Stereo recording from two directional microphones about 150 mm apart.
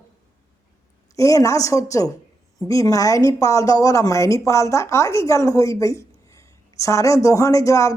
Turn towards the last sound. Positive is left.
turn(degrees=20)  # may be behind; listen again after turning